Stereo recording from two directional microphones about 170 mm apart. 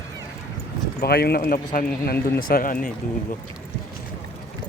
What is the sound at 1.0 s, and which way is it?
Speech, 65° left (ahead or behind).